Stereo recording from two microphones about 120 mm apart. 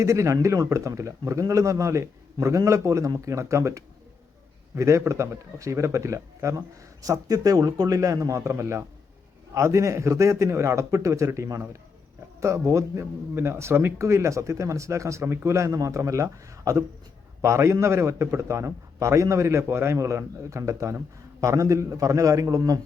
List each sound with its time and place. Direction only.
0.0 s speech: 25° right (ahead or behind)